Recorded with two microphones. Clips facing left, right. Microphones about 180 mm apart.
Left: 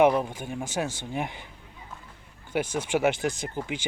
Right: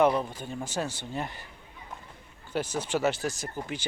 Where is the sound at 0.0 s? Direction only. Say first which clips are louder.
Left 3 dB; 15° left (ahead or behind).